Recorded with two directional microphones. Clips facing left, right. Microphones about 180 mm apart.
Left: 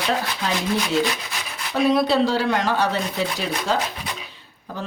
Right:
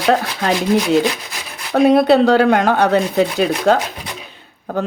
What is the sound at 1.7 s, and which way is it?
Speech, 60° right (ahead or behind).